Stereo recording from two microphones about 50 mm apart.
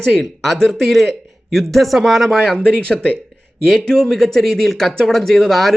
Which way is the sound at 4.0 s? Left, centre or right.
Centre.